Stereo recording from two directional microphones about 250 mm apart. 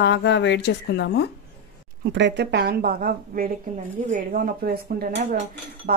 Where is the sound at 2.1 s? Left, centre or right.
Right.